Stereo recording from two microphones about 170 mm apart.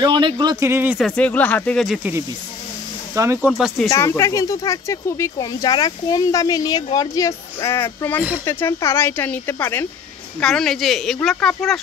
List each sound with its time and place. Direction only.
0.0 s speech: 25° right (ahead or behind)
0.9 s speech: 5° left (ahead or behind)
3.2 s speech: 15° right (ahead or behind)
3.4 s speech: 5° right (ahead or behind)
3.9 s speech: 15° left (ahead or behind)